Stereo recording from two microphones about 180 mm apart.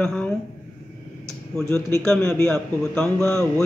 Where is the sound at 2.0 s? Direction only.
5° left (ahead or behind).